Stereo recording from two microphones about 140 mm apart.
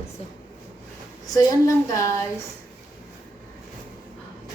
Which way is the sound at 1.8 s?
20° left (ahead or behind).